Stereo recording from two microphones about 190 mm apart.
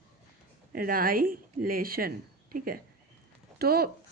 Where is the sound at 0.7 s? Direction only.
50° right (ahead or behind).